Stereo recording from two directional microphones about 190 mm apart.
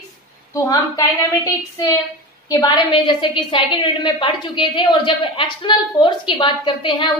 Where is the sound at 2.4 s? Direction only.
25° left (ahead or behind).